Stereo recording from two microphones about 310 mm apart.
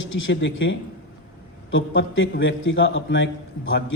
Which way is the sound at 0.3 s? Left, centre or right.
Left.